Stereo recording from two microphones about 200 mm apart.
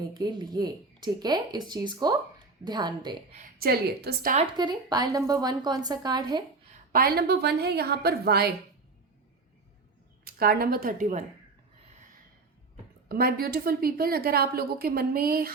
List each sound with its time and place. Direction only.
0.1 s speech: 20° right (ahead or behind)
3.3 s a woman's voice: 45° right (ahead or behind)
4.5 s speech: 20° right (ahead or behind)
6.9 s a woman's voice: 50° right (ahead or behind)
10.2 s a woman's voice: 50° right (ahead or behind)
13.1 s a woman's voice: 50° right (ahead or behind)